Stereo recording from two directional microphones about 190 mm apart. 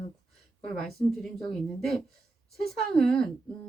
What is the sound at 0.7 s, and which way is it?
Speech, centre (ahead or behind).